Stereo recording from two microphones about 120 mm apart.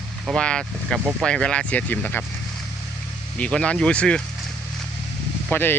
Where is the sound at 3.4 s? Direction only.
10° left (ahead or behind).